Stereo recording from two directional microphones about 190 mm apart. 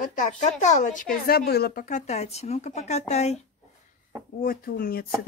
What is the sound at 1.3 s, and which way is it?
Speech, 55° left (ahead or behind).